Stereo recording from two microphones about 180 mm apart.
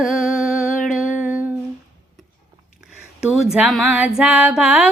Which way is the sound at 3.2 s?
Centre (ahead or behind).